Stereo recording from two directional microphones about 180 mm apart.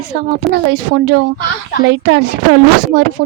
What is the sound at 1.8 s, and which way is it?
Speech, 90° right.